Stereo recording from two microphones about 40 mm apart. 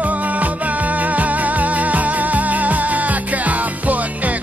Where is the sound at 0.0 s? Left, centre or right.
Right.